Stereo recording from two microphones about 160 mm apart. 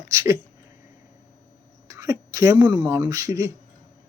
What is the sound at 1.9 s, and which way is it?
Speech, 20° right (ahead or behind).